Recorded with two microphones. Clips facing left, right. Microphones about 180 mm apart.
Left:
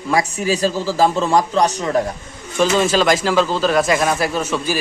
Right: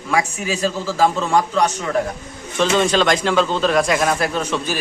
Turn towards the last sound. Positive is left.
turn(degrees=5)  # may be behind; listen again after turning